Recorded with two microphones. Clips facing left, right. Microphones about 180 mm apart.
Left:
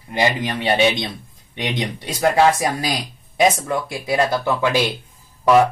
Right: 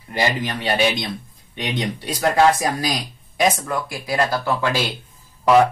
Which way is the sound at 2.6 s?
20° left (ahead or behind).